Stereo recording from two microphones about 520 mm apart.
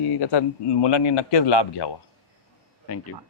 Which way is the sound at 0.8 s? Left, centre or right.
Left.